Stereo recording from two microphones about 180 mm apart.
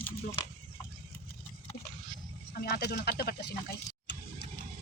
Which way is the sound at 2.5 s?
60° left (ahead or behind).